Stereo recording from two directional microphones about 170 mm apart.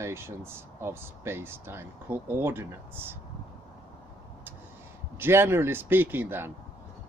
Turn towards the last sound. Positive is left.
turn(degrees=-10)  # may be behind; listen again after turning